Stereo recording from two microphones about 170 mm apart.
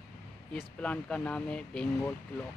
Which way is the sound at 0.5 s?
5° left (ahead or behind).